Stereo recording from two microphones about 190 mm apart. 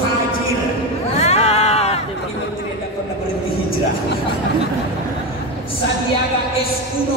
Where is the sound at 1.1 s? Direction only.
35° left (ahead or behind).